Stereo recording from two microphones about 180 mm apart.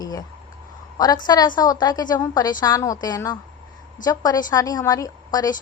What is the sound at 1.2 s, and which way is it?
A woman's voice, 25° left (ahead or behind).